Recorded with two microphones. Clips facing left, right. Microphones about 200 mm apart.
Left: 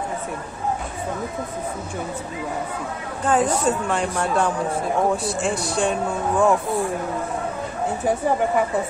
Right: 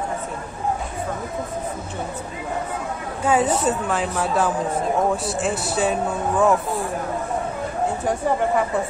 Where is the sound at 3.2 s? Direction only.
10° right (ahead or behind).